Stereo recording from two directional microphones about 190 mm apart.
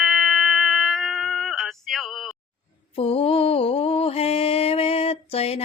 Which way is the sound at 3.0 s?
30° left (ahead or behind).